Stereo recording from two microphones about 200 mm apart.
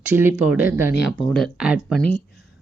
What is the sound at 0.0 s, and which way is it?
Speech, 10° right (ahead or behind).